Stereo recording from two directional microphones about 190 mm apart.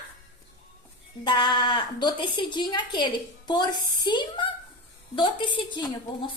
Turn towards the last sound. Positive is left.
turn(degrees=25)  # may be behind; listen again after turning